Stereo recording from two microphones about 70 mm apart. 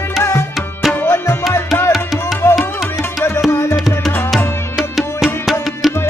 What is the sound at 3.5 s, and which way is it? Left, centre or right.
Music, left.